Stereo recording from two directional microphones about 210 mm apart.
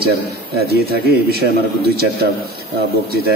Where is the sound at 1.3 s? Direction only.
50° right (ahead or behind).